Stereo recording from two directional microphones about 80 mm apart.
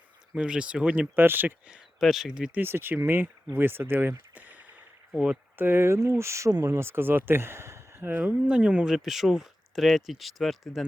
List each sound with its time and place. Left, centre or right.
0.3 s speech: centre
1.1 s speech: right
1.7 s speech: centre
2.6 s speech: right
4.4 s a sound: centre
5.1 s speech: centre
5.5 s speech: right
8.2 s speech: centre